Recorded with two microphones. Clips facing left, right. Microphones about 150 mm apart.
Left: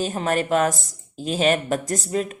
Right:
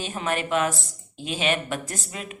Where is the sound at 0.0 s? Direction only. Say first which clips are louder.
Left 5 dB; 40° left (ahead or behind).